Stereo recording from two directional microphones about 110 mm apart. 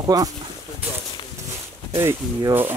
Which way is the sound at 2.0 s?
30° right (ahead or behind).